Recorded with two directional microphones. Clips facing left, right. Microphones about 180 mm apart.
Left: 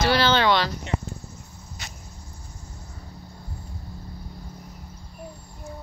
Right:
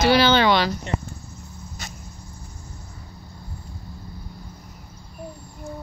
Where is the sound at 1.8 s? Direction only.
45° right (ahead or behind).